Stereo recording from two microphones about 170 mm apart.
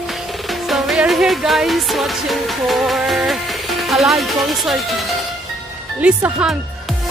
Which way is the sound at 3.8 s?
Centre (ahead or behind).